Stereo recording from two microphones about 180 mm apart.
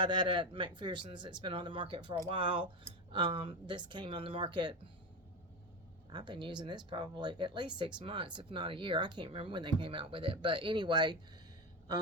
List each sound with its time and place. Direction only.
0.0 s speech: 25° right (ahead or behind)
6.1 s speech: 25° right (ahead or behind)